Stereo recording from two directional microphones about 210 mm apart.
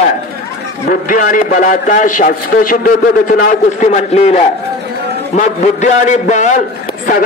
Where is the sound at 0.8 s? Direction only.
40° left (ahead or behind).